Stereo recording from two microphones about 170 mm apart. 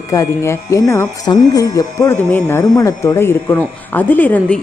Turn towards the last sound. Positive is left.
turn(degrees=10)  # may be behind; listen again after turning